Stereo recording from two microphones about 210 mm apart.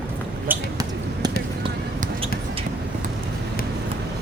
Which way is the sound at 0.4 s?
15° right (ahead or behind).